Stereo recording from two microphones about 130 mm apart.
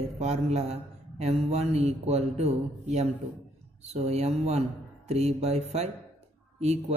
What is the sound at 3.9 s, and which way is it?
Speech, 55° right (ahead or behind).